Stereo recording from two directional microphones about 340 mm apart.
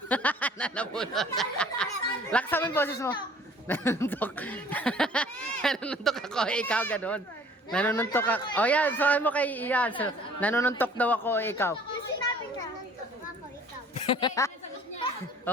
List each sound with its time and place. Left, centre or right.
0.1 s a sound: centre
1.1 s speech: centre
12.2 s children playing: centre
13.9 s a woman's voice: centre